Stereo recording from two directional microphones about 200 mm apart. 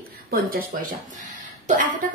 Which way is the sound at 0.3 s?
45° right (ahead or behind).